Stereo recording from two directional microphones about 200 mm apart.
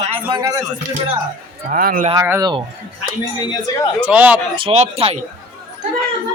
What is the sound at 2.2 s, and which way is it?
Speech, 10° right (ahead or behind).